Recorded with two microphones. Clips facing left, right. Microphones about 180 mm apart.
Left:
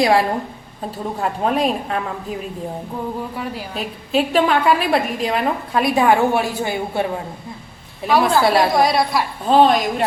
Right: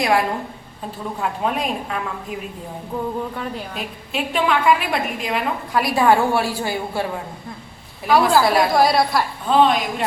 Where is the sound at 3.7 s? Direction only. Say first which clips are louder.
Left 7 dB; 35° left (ahead or behind).